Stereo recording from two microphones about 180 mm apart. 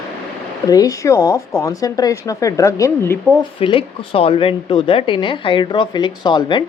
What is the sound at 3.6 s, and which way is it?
Speech, 30° left (ahead or behind).